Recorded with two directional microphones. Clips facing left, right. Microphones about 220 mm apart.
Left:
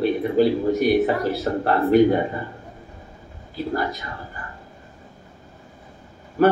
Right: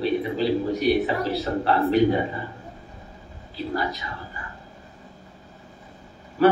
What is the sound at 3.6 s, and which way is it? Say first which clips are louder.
Speech: left 3 dB; 50° left (ahead or behind).